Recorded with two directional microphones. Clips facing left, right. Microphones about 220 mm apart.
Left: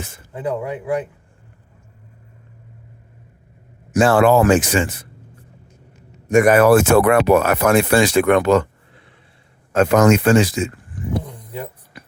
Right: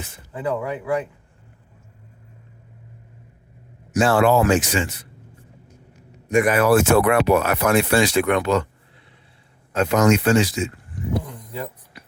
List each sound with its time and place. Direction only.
0.3 s speech: 20° left (ahead or behind)
3.9 s speech: 50° left (ahead or behind)
6.2 s speech: 45° left (ahead or behind)
9.7 s speech: 50° left (ahead or behind)
11.2 s vehicle: 15° left (ahead or behind)
11.9 s music: 50° left (ahead or behind)